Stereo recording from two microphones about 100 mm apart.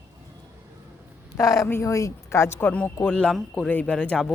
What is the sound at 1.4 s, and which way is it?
Speech, 35° left (ahead or behind).